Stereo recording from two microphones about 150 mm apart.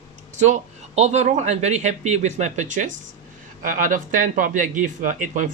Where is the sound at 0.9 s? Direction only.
50° right (ahead or behind).